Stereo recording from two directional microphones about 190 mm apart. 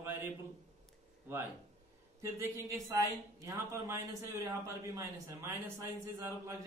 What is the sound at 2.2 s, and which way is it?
Speech, 15° right (ahead or behind).